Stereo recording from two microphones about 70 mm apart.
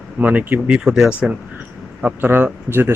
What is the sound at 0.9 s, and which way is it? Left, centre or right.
Speech, centre.